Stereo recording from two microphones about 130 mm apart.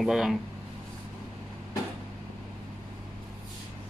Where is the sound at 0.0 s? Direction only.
5° right (ahead or behind).